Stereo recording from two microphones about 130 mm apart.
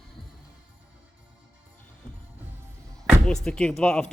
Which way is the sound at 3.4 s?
5° left (ahead or behind).